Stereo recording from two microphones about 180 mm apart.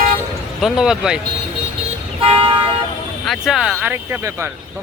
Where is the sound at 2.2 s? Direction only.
30° right (ahead or behind).